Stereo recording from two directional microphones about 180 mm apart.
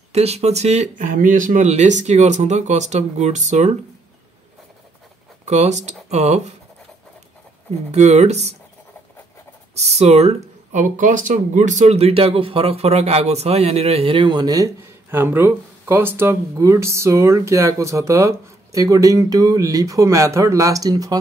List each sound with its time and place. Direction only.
0.1 s speech: 35° right (ahead or behind)
5.4 s speech: 40° right (ahead or behind)
7.9 s speech: 40° right (ahead or behind)
9.8 s speech: 35° right (ahead or behind); by 21.2 s 20° right (ahead or behind)